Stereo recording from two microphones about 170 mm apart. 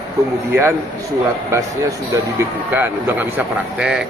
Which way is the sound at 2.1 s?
15° right (ahead or behind).